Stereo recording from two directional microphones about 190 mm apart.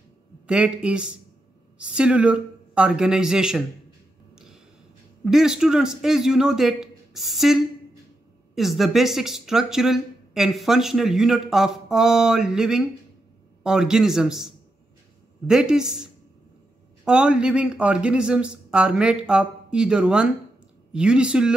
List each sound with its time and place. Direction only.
0.5 s speech: 5° right (ahead or behind)
5.2 s speech: centre (ahead or behind)